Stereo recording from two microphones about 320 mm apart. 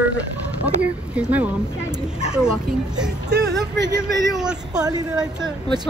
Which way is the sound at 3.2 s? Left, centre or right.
Right.